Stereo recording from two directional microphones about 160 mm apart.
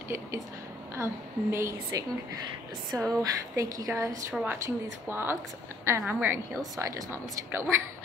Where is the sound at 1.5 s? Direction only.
20° right (ahead or behind).